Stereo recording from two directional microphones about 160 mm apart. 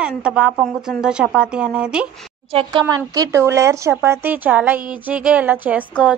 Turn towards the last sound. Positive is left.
turn(degrees=-10)  # may be behind; listen again after turning